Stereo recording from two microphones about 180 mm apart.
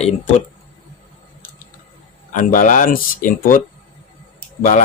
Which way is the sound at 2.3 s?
45° left (ahead or behind).